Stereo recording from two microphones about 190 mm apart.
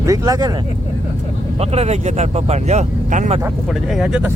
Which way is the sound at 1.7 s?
35° right (ahead or behind).